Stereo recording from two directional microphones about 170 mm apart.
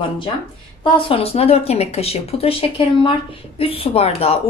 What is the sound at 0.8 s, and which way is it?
A woman's voice, 35° left (ahead or behind).